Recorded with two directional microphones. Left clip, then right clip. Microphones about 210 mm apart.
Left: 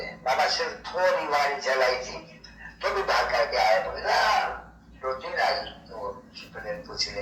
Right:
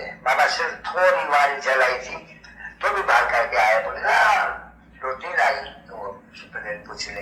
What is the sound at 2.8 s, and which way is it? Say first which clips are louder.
Speech: right 6 dB; 20° left (ahead or behind).